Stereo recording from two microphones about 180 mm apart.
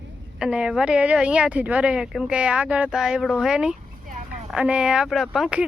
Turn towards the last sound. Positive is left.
turn(degrees=-5)  # may be behind; listen again after turning